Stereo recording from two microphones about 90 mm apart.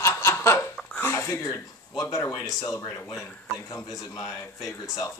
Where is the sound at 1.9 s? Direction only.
45° left (ahead or behind).